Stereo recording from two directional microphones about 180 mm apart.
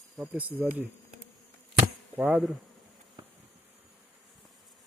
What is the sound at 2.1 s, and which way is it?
Speech, 10° right (ahead or behind).